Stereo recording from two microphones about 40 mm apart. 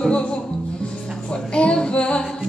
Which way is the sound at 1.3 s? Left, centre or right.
Left.